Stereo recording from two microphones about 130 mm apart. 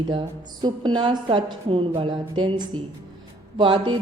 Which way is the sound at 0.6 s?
35° right (ahead or behind).